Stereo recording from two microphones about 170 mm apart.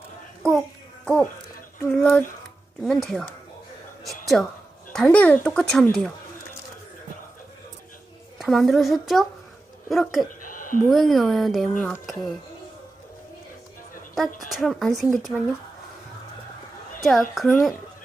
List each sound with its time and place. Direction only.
1.0 s speech: 5° left (ahead or behind)
4.0 s a sound: centre (ahead or behind)
4.9 s speech: 5° left (ahead or behind)
8.4 s speech: centre (ahead or behind)
10.4 s a sound: 55° left (ahead or behind)
10.8 s speech: centre (ahead or behind)
14.5 s speech: centre (ahead or behind)
17.0 s speech: centre (ahead or behind)